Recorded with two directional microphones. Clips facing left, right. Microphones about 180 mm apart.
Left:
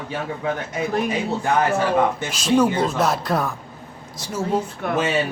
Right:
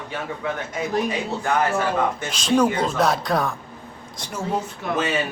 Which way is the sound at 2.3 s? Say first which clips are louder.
Even; 5° left (ahead or behind).